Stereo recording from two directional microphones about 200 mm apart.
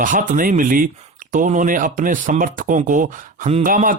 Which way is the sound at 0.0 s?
40° right (ahead or behind).